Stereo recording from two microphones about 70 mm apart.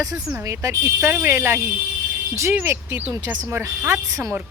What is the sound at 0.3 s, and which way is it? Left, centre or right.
Speech, right.